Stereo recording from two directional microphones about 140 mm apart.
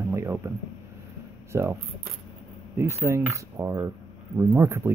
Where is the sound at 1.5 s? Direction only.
20° right (ahead or behind).